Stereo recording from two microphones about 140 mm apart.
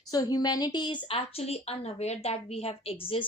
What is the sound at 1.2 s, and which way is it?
A woman's voice, 50° left (ahead or behind).